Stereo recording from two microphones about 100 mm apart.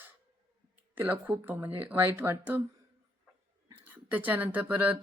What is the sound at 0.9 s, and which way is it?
Speech, 15° right (ahead or behind).